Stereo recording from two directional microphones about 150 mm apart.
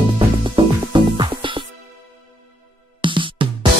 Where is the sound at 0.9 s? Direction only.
30° right (ahead or behind).